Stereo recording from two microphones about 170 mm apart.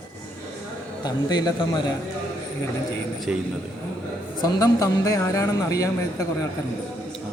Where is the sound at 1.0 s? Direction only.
25° left (ahead or behind).